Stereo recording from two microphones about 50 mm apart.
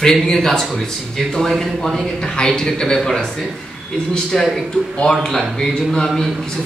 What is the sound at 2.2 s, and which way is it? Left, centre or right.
Speech, centre.